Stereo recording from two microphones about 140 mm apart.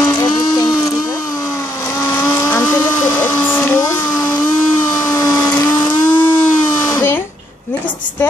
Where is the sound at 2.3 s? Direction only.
20° left (ahead or behind).